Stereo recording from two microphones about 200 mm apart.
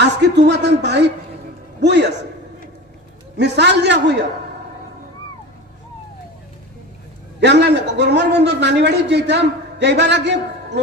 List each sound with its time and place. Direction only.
0.0 s a man's voice: 60° right (ahead or behind)
3.3 s a man's voice: 60° right (ahead or behind)
7.3 s a man's voice: 60° right (ahead or behind)